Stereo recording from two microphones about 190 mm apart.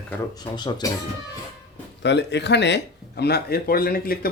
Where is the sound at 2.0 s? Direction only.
65° left (ahead or behind).